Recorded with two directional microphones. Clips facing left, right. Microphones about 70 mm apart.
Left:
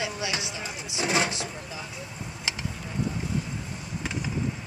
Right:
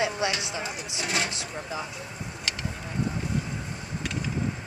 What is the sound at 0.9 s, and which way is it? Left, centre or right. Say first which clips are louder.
Speech: left 4 dB; left.